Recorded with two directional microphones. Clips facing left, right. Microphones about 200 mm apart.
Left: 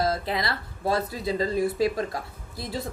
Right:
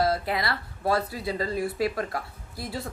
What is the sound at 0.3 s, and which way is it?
A woman's voice, 20° left (ahead or behind).